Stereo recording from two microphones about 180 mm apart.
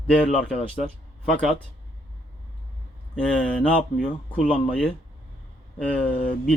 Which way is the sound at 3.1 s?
5° left (ahead or behind).